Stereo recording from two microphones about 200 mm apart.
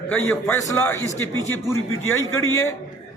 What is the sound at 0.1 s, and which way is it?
A man's voice, 10° left (ahead or behind).